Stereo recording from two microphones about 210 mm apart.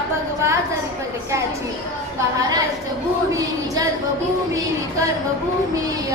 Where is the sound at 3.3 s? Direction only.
15° right (ahead or behind).